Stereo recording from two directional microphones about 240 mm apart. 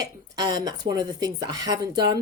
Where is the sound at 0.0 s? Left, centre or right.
Centre.